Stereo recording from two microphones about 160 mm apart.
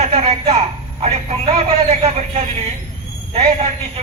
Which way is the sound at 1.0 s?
40° right (ahead or behind).